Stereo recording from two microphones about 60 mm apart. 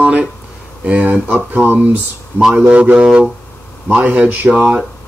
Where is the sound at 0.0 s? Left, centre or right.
Right.